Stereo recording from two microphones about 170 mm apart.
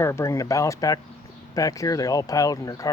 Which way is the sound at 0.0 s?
15° left (ahead or behind).